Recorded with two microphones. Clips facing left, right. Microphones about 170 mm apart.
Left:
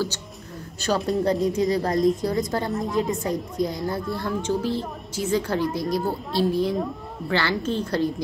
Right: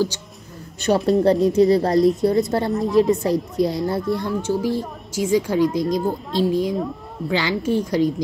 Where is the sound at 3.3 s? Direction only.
70° right (ahead or behind).